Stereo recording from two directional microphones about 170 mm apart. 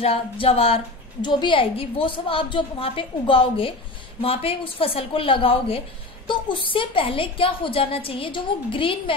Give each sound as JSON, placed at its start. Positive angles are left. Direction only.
{"t": 0.0, "sound": "a woman's voice", "side_deg": 35}